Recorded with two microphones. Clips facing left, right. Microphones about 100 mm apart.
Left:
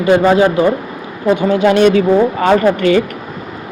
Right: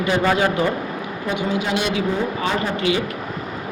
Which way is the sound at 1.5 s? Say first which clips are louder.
Left 14 dB; 55° left (ahead or behind).